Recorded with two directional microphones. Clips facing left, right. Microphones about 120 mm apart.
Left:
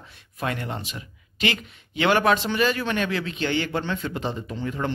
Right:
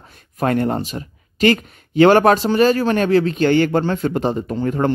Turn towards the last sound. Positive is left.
turn(degrees=-50)  # may be behind; listen again after turning